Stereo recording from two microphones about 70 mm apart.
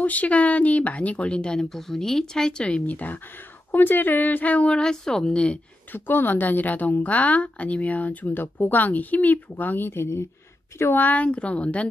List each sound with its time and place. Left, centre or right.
0.0 s speech: left
5.9 s a woman's voice: left
11.1 s speech: centre